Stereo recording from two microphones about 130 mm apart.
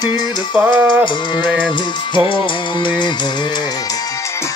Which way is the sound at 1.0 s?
35° left (ahead or behind).